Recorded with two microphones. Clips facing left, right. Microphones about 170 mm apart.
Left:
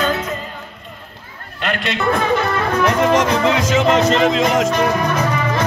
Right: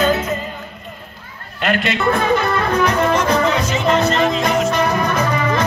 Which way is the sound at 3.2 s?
90° left.